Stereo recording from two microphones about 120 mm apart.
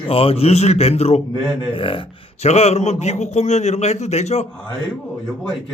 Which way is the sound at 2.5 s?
65° left (ahead or behind).